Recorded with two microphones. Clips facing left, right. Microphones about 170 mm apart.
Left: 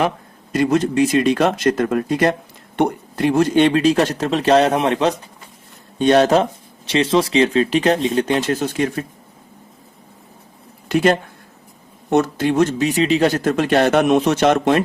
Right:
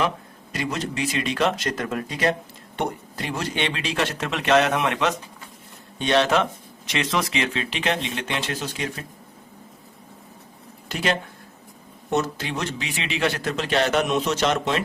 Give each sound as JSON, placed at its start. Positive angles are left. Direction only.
{"t": 0.5, "sound": "speech", "side_deg": 50}
{"t": 6.0, "sound": "speech", "side_deg": 45}
{"t": 10.8, "sound": "speech", "side_deg": 55}